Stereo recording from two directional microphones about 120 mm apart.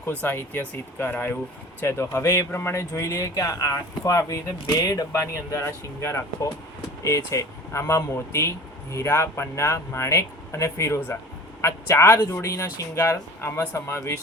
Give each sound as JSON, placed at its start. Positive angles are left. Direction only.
{"t": 0.0, "sound": "speech", "side_deg": 15}
{"t": 5.2, "sound": "speech", "side_deg": 20}